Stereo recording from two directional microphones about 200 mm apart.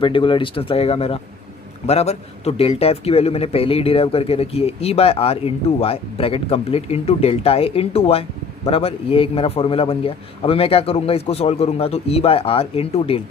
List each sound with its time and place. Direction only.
0.0 s a man's voice: 25° left (ahead or behind)